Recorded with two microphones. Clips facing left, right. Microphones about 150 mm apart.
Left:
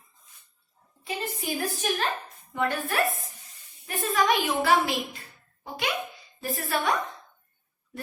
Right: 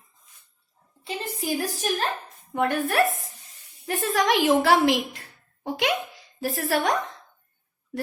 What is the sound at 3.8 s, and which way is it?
A woman's voice, 75° right (ahead or behind).